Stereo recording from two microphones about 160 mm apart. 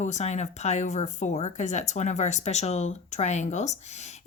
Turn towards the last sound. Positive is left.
turn(degrees=45)  # may be behind; listen again after turning